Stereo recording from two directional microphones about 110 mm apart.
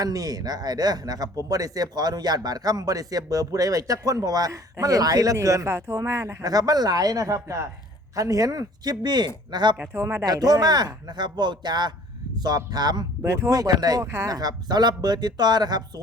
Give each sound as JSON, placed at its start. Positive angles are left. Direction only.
{"t": 0.0, "sound": "speech", "side_deg": -35}
{"t": 9.7, "sound": "speech", "side_deg": -20}
{"t": 10.2, "sound": "speech", "side_deg": -35}